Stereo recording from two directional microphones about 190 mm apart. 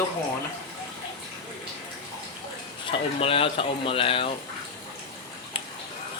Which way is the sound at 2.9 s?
30° left (ahead or behind).